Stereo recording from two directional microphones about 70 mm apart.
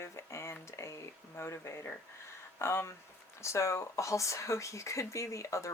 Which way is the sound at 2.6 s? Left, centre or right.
Left.